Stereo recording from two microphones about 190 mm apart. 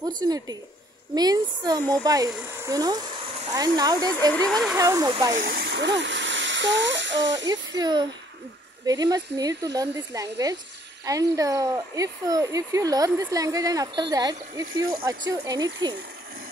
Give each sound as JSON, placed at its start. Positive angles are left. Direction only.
{"t": 0.2, "sound": "speech", "side_deg": -20}
{"t": 4.3, "sound": "speech", "side_deg": 5}
{"t": 4.7, "sound": "speech", "side_deg": -15}
{"t": 5.3, "sound": "speech", "side_deg": -55}
{"t": 7.4, "sound": "speech", "side_deg": -20}